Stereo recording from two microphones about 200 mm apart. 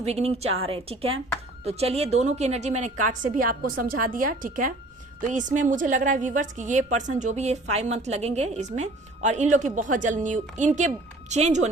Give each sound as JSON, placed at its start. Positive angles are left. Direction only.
{"t": 0.0, "sound": "a woman's voice", "side_deg": -30}